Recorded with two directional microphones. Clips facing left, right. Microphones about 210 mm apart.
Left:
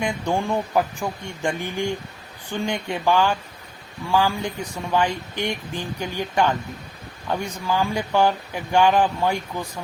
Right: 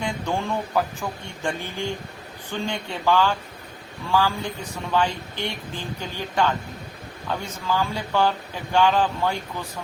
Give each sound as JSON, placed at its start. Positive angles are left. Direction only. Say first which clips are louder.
{"t": 0.0, "sound": "speech", "louder": "left 3 dB", "side_deg": 15}